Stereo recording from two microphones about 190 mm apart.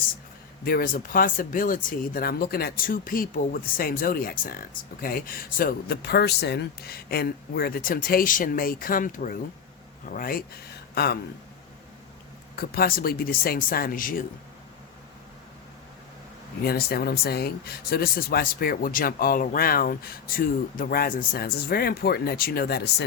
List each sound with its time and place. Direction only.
0.6 s speech: 50° left (ahead or behind)
12.5 s speech: 50° left (ahead or behind)
16.6 s speech: 55° left (ahead or behind)